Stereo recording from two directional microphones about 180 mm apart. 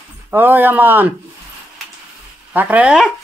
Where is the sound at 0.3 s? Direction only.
10° right (ahead or behind).